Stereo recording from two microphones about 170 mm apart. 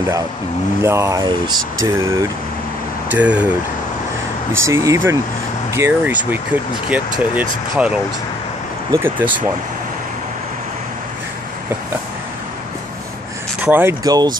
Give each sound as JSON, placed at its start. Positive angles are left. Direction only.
{"t": 0.8, "sound": "speech", "side_deg": -15}
{"t": 4.6, "sound": "speech", "side_deg": -15}
{"t": 13.6, "sound": "speech", "side_deg": -10}